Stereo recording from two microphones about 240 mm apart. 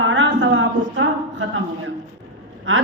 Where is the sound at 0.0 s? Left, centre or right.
Right.